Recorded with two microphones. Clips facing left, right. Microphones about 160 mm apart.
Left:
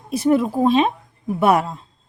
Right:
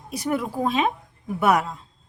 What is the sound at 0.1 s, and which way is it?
Speech, 25° left (ahead or behind).